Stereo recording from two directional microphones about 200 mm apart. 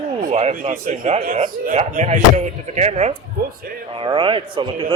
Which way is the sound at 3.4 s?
50° right (ahead or behind).